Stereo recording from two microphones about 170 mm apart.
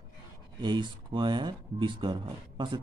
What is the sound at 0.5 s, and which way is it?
Speech, 25° right (ahead or behind).